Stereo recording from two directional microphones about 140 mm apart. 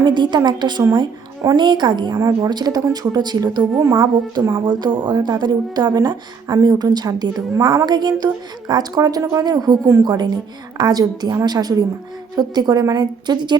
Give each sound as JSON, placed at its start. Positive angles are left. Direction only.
{"t": 0.0, "sound": "a woman's voice", "side_deg": -30}